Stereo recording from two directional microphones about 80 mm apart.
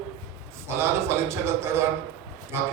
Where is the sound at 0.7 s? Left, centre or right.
Right.